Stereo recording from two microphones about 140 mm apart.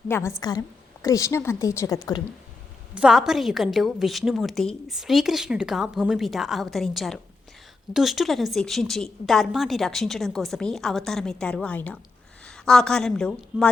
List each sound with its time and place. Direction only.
0.1 s a woman's voice: 20° left (ahead or behind)
2.9 s a woman's voice: 5° right (ahead or behind)